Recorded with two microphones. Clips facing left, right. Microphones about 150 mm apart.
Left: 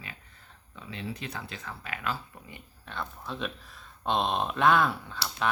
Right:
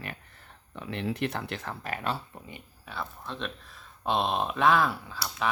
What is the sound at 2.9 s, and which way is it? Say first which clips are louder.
Speech: even; centre (ahead or behind).